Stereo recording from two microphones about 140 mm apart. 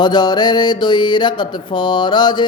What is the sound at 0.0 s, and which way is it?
Mantra, 30° left (ahead or behind).